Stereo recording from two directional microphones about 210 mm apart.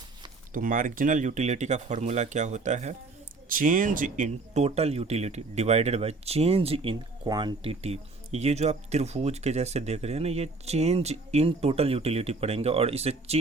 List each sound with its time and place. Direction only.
0.5 s speech: 40° right (ahead or behind)